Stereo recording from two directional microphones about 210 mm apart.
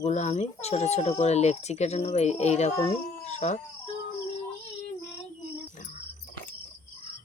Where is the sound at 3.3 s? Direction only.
35° left (ahead or behind).